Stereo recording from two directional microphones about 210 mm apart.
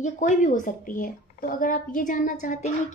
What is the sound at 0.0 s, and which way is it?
A woman's voice, 35° left (ahead or behind).